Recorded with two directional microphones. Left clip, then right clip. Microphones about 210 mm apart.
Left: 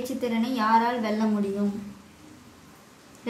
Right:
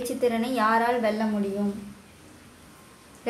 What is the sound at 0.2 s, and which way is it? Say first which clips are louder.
Speech: right 3 dB; 20° right (ahead or behind).